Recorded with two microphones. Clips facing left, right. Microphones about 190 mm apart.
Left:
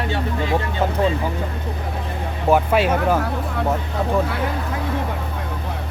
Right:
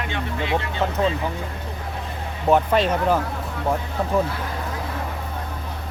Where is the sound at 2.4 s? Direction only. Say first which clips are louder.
Left 1 dB; 10° left (ahead or behind).